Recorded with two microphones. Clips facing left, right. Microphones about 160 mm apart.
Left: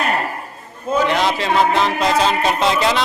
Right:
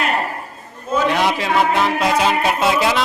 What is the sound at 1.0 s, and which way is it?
Speech, 10° right (ahead or behind).